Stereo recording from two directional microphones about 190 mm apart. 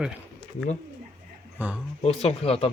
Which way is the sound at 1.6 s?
10° right (ahead or behind).